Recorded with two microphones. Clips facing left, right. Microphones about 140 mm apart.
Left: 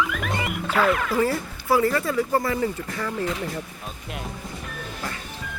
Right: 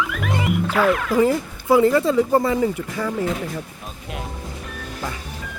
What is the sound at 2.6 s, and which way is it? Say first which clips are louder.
Speech: right 4 dB; 10° right (ahead or behind).